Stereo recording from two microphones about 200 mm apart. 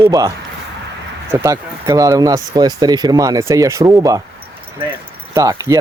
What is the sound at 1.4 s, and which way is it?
Speech, 15° right (ahead or behind).